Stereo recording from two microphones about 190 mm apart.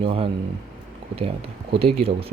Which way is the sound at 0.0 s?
30° right (ahead or behind).